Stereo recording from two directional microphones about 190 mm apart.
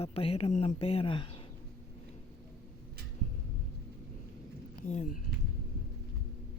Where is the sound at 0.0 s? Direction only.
30° left (ahead or behind).